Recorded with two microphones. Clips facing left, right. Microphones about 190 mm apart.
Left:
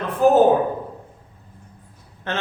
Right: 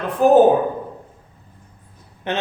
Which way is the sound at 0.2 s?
15° right (ahead or behind).